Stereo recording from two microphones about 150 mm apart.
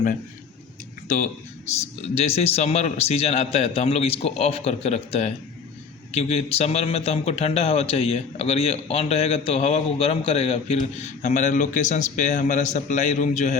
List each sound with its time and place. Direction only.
1.0 s speech: 60° left (ahead or behind)
1.7 s a man's voice: 45° left (ahead or behind)